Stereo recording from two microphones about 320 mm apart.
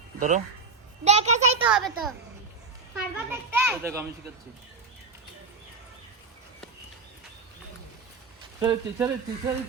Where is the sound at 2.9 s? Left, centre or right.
Centre.